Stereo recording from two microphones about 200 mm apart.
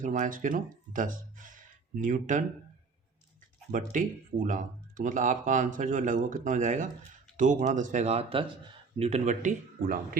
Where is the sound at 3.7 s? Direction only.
40° right (ahead or behind).